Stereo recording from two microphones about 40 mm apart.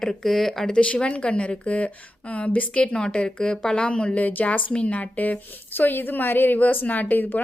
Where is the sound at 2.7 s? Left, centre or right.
Left.